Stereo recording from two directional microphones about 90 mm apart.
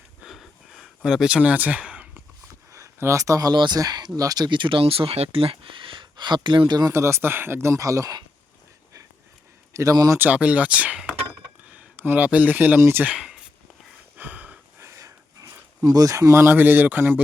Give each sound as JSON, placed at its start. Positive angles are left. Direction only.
{"t": 0.3, "sound": "a sound", "side_deg": 0}
{"t": 2.7, "sound": "speech", "side_deg": -35}
{"t": 4.4, "sound": "speech", "side_deg": -60}
{"t": 6.9, "sound": "speech", "side_deg": -30}
{"t": 9.7, "sound": "speech", "side_deg": -40}
{"t": 10.2, "sound": "speech", "side_deg": -15}
{"t": 13.1, "sound": "speech", "side_deg": -5}
{"t": 14.2, "sound": "a sound", "side_deg": -20}
{"t": 14.8, "sound": "a sound", "side_deg": -35}
{"t": 16.3, "sound": "a man's voice", "side_deg": -25}